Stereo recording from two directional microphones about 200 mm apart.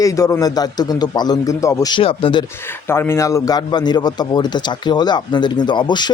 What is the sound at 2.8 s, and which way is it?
A man's voice, 10° left (ahead or behind).